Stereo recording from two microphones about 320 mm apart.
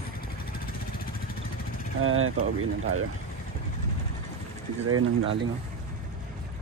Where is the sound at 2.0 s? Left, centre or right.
Right.